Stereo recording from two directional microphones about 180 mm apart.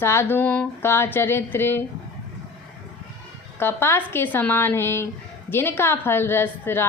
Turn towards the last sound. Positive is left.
turn(degrees=10)  # may be behind; listen again after turning